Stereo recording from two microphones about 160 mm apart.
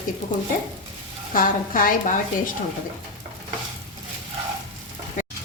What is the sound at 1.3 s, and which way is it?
A woman's voice, 60° left (ahead or behind).